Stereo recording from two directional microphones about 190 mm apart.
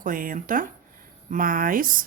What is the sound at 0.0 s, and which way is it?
Speech, 45° right (ahead or behind).